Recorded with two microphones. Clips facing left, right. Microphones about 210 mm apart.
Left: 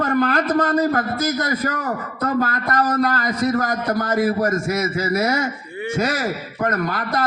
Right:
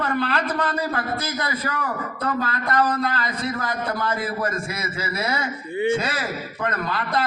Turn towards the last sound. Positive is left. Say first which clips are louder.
# left 2 dB
turn(degrees=45)  # may be behind; listen again after turning